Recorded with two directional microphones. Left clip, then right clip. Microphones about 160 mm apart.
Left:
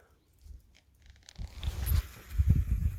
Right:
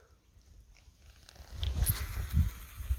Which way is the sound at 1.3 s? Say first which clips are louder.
Left 3 dB; 70° left (ahead or behind).